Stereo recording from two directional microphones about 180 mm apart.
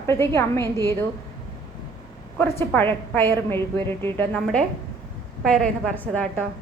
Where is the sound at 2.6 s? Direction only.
10° left (ahead or behind).